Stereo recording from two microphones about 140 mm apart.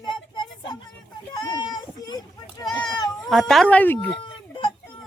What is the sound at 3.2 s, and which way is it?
Speech, centre (ahead or behind).